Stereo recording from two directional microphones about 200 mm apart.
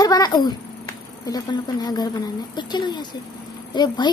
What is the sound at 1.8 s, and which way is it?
A woman's voice, 20° left (ahead or behind).